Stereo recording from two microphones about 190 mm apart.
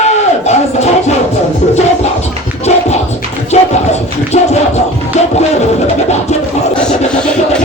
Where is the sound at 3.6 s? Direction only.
35° left (ahead or behind).